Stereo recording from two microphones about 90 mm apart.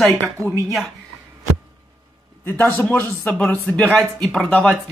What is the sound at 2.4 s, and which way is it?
Speech, 20° left (ahead or behind).